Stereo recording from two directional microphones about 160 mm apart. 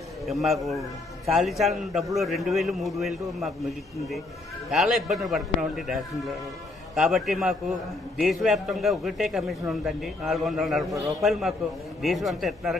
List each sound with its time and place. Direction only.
0.3 s a man's voice: centre (ahead or behind)
10.9 s a man's voice: 20° right (ahead or behind)
11.1 s a man's voice: centre (ahead or behind)